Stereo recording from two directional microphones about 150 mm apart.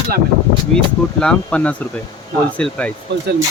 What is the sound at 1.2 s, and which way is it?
Speech, 5° left (ahead or behind).